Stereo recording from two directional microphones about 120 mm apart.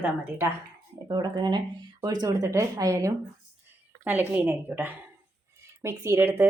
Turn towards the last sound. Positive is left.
turn(degrees=-20)  # may be behind; listen again after turning